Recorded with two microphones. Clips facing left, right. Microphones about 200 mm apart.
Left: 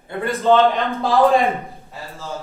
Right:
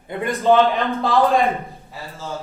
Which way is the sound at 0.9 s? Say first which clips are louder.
Left 1 dB; centre (ahead or behind).